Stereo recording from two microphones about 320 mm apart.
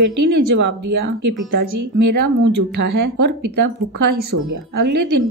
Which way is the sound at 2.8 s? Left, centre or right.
Right.